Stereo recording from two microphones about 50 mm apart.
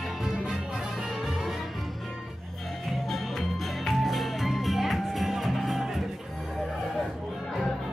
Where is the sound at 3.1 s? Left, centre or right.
Centre.